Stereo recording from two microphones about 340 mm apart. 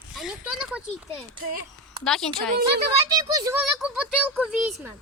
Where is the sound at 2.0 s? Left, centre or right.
Centre.